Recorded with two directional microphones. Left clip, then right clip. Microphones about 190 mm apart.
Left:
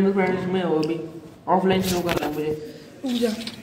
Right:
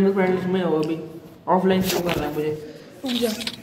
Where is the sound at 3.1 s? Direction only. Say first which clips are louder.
Right 1 dB; 55° right (ahead or behind).